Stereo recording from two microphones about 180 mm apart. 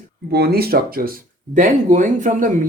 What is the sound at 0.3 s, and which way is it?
Speech, 60° right (ahead or behind).